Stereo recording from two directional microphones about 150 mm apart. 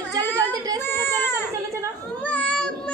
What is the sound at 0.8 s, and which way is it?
Speech, 15° left (ahead or behind).